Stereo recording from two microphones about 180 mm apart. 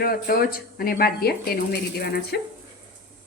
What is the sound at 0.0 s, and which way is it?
A woman's voice, 55° left (ahead or behind).